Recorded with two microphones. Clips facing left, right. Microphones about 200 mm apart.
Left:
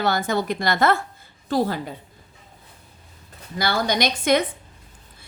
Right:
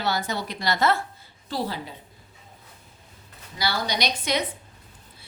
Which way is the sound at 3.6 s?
50° left (ahead or behind).